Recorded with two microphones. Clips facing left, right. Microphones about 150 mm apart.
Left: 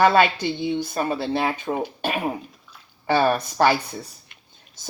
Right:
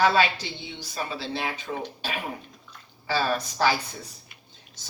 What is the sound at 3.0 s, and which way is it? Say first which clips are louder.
Speech: left 6 dB; 60° left (ahead or behind).